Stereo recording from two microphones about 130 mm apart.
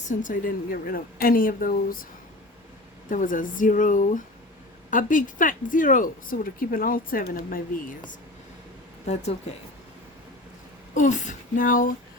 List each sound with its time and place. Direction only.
0.0 s speech: 80° left
3.1 s speech: 90° left
9.1 s speech: 60° left (ahead or behind)
10.9 s speech: 80° left